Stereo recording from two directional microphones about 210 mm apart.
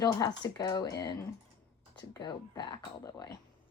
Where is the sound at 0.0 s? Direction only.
20° left (ahead or behind).